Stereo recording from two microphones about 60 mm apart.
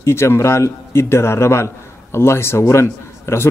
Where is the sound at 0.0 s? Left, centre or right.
Left.